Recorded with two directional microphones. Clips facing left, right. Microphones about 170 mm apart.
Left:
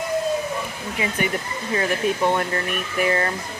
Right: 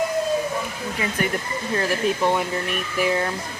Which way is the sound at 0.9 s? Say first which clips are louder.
Left 1 dB; 5° left (ahead or behind).